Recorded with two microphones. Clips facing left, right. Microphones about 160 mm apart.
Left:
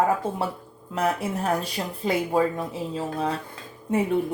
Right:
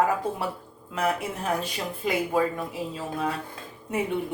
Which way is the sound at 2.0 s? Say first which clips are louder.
Left 2 dB; 30° left (ahead or behind).